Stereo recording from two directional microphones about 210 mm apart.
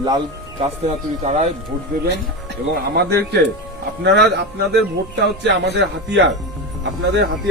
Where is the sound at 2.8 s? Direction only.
50° right (ahead or behind).